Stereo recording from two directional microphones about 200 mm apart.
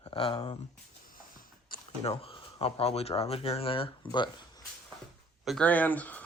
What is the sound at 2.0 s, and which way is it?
Speech, 25° left (ahead or behind).